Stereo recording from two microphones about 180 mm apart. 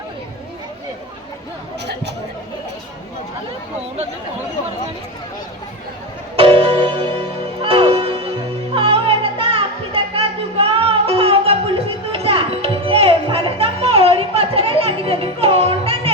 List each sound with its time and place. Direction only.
6.3 s music: 30° right (ahead or behind)